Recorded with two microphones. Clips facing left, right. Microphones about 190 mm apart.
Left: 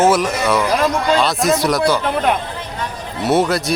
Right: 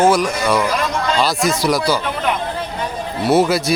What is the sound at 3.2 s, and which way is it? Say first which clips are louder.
Speech: right 1 dB; centre (ahead or behind).